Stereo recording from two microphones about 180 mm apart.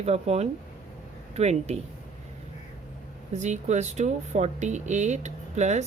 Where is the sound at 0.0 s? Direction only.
35° right (ahead or behind).